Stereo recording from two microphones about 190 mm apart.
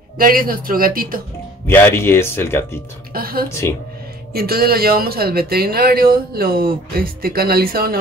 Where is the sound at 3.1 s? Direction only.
50° right (ahead or behind).